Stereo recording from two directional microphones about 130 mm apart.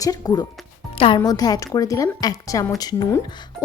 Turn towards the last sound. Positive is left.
turn(degrees=30)  # may be behind; listen again after turning